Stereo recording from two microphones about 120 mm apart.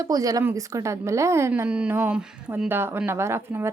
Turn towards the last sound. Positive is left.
turn(degrees=-20)  # may be behind; listen again after turning